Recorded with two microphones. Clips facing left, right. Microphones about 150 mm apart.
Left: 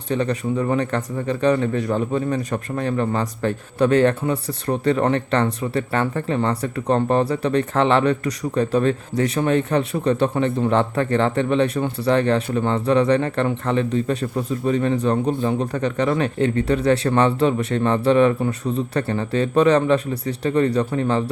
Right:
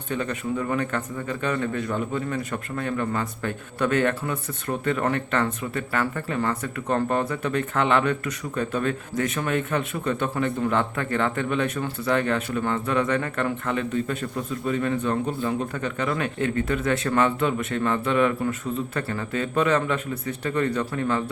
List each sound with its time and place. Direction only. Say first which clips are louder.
0.1 s speech: left 5 dB; 35° left (ahead or behind)
15.7 s speech: left 6 dB; 40° left (ahead or behind)